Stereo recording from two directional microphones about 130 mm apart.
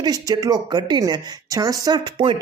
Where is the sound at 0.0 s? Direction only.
30° right (ahead or behind).